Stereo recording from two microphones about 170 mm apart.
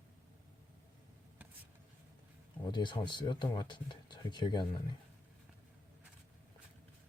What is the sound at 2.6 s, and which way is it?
Speech, 25° left (ahead or behind).